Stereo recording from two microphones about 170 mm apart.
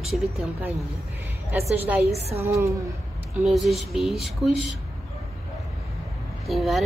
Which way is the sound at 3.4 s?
Centre (ahead or behind).